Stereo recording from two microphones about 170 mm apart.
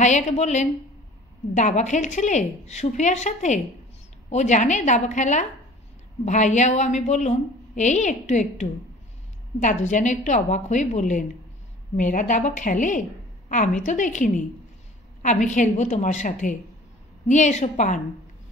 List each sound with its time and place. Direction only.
0.0 s a woman's voice: 40° left (ahead or behind)